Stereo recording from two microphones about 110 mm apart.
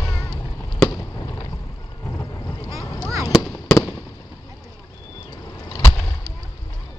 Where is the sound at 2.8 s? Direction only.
35° left (ahead or behind).